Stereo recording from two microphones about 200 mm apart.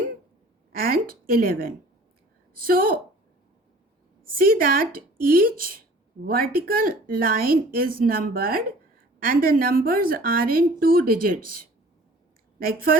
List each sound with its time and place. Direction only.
0.7 s a woman's voice: 45° right (ahead or behind)
4.4 s a woman's voice: 45° right (ahead or behind)